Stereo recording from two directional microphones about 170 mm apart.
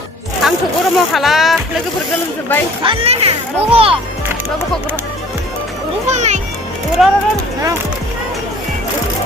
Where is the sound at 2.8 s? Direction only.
30° right (ahead or behind).